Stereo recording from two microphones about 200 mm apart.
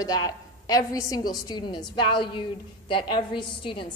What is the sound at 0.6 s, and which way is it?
A woman's voice, 15° left (ahead or behind).